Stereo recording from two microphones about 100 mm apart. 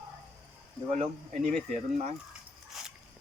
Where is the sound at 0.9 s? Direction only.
90° right.